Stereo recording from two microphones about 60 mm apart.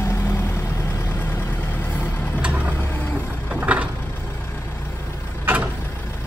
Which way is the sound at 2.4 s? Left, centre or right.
Right.